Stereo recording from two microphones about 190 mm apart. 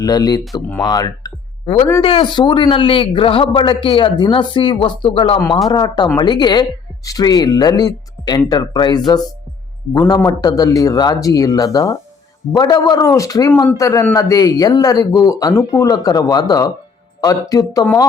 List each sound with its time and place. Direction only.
0.0 s a man's voice: 20° left (ahead or behind)
0.8 s a sound: 20° left (ahead or behind)
2.0 s a man's voice: 30° left (ahead or behind)